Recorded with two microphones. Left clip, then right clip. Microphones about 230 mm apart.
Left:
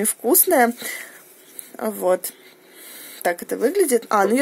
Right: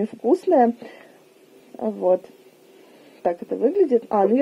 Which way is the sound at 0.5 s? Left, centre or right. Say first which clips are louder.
Even; centre.